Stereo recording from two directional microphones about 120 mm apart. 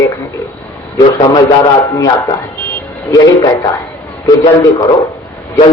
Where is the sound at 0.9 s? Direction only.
30° left (ahead or behind).